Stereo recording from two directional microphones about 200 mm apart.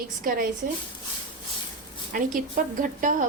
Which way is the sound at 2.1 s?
45° right (ahead or behind).